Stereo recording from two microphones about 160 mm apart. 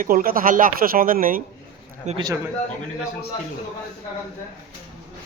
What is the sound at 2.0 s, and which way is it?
Speech, 45° right (ahead or behind).